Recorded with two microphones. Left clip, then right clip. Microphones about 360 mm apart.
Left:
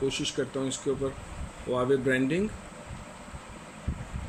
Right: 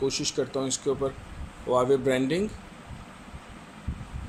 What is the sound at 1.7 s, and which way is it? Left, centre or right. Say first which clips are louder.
Speech: right 3 dB; centre.